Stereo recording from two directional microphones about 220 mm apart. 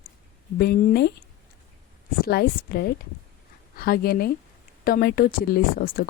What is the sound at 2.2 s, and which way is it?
Speech, 45° left (ahead or behind).